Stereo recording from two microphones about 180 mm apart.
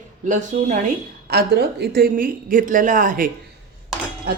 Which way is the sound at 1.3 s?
65° right (ahead or behind).